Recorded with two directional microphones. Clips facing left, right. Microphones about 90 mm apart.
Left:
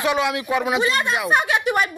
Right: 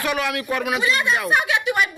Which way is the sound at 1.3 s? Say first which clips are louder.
Left 1 dB; 40° left (ahead or behind).